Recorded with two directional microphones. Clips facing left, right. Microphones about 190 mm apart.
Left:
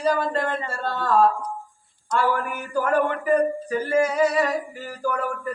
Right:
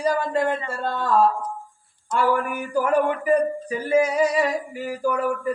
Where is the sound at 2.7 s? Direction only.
10° right (ahead or behind).